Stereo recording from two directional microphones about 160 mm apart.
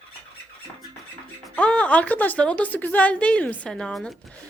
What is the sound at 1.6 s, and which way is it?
A woman's voice, 5° left (ahead or behind).